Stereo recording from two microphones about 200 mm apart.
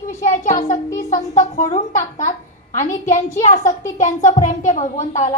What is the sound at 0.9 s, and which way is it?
A woman's voice, 35° left (ahead or behind).